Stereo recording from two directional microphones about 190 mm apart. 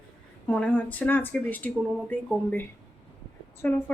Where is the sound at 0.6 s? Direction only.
5° left (ahead or behind).